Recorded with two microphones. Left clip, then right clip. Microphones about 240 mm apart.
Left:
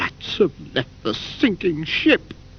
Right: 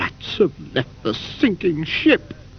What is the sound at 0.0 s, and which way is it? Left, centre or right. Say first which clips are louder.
Speech: right 1 dB; right.